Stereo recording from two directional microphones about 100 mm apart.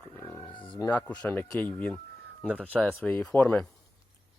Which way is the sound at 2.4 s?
15° right (ahead or behind).